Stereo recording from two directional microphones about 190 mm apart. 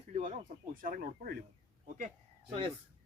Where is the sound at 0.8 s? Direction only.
50° right (ahead or behind).